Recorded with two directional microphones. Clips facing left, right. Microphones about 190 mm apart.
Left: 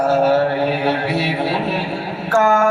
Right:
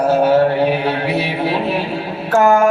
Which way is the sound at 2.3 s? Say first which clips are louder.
Right 3 dB; 15° right (ahead or behind).